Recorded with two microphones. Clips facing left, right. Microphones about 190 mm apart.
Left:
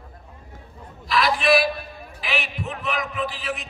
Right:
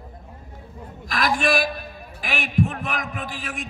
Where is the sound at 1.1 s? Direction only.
50° right (ahead or behind).